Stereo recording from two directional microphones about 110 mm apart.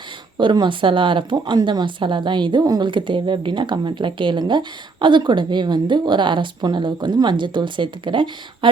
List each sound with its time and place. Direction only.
0.3 s a woman's voice: 45° right (ahead or behind)